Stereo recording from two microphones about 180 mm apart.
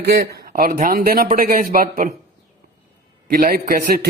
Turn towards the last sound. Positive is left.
turn(degrees=-55)  # may be behind; listen again after turning